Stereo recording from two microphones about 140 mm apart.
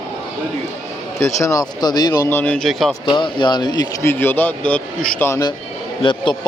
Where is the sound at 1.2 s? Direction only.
20° left (ahead or behind).